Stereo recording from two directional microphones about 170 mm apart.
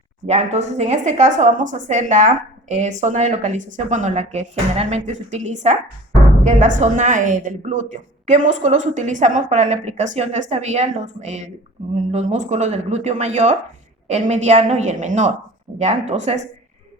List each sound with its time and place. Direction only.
0.3 s a woman's voice: 40° right (ahead or behind)